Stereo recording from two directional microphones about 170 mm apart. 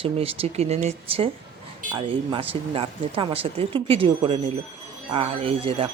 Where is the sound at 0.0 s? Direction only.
35° right (ahead or behind).